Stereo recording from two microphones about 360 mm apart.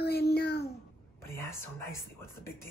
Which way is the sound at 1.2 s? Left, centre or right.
Centre.